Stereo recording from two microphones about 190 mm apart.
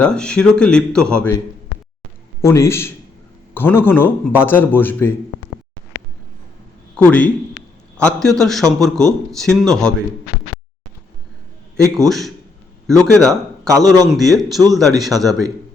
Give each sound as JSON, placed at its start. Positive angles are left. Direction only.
{"t": 0.0, "sound": "a man's voice", "side_deg": 5}
{"t": 2.4, "sound": "a man's voice", "side_deg": 15}
{"t": 6.9, "sound": "a man's voice", "side_deg": 5}
{"t": 11.9, "sound": "a man's voice", "side_deg": 0}
{"t": 12.9, "sound": "a man's voice", "side_deg": -15}
{"t": 14.1, "sound": "a man's voice", "side_deg": 0}